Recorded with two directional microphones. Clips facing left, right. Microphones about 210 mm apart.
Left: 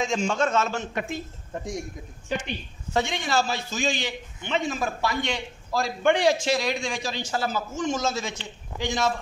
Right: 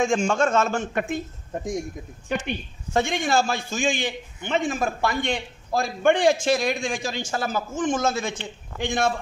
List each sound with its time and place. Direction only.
0.0 s a man's voice: 50° right (ahead or behind)
2.4 s a man's voice: 50° right (ahead or behind)